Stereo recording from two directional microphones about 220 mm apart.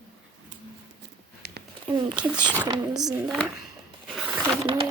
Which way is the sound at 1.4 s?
50° right (ahead or behind).